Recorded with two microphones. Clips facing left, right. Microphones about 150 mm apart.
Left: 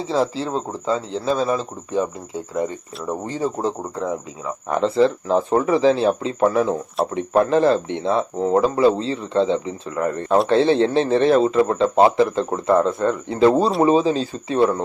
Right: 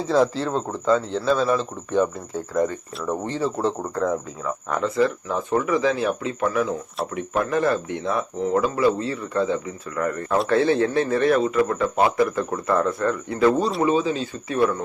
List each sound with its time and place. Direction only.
0.0 s speech: centre (ahead or behind)
0.3 s speech: 35° left (ahead or behind)
3.1 s speech: 15° left (ahead or behind)
4.8 s a man's voice: 30° left (ahead or behind)